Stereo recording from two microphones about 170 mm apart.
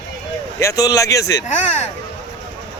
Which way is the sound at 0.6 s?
20° left (ahead or behind).